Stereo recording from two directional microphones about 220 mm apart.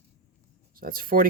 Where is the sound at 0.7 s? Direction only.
40° right (ahead or behind).